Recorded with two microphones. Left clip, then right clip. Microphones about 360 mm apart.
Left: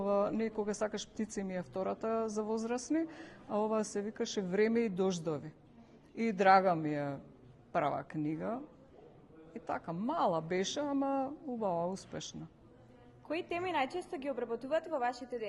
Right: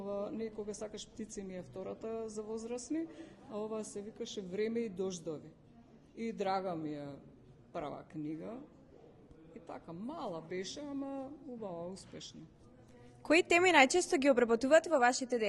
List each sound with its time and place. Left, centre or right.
0.0 s speech: left
9.6 s speech: left
13.2 s speech: right